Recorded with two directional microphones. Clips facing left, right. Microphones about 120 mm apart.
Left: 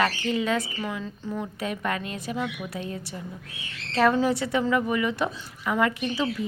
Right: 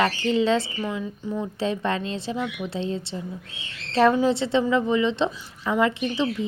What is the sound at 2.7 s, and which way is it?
A woman's voice, 25° right (ahead or behind).